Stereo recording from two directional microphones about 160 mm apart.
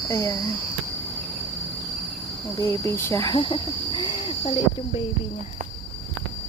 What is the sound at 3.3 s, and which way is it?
Cricket, 30° left (ahead or behind).